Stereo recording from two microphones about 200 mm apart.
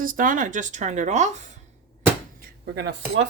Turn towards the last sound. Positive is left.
turn(degrees=-55)  # may be behind; listen again after turning